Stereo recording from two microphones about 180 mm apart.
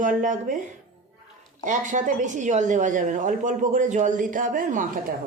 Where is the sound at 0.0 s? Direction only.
45° right (ahead or behind).